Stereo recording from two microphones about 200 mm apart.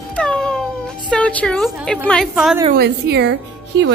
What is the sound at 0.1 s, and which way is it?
Music, 5° left (ahead or behind).